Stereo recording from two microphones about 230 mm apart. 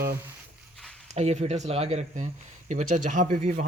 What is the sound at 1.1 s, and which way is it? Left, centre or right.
Speech, right.